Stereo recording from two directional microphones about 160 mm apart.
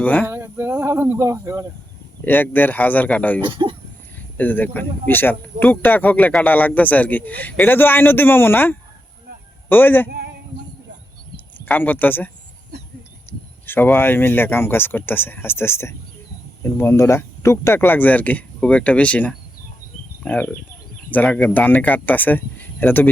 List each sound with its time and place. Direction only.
0.0 s speech: 10° left (ahead or behind)
0.3 s speech: 15° right (ahead or behind)
2.2 s speech: 10° left (ahead or behind)
3.4 s speech: 30° right (ahead or behind)
4.4 s speech: 10° left (ahead or behind)
11.5 s speech: 10° left (ahead or behind)
13.3 s a sound: 15° left (ahead or behind)
13.7 s speech: 10° left (ahead or behind)